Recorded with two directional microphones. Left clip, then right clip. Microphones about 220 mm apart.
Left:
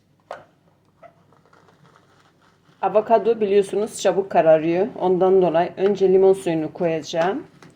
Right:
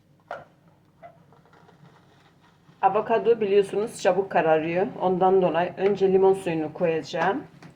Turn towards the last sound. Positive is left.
turn(degrees=40)  # may be behind; listen again after turning